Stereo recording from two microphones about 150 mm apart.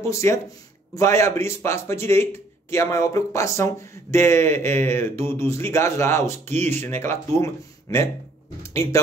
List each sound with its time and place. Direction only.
0.0 s speech: 20° left (ahead or behind)